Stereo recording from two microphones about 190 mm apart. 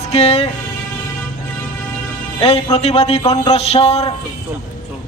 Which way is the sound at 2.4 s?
30° left (ahead or behind).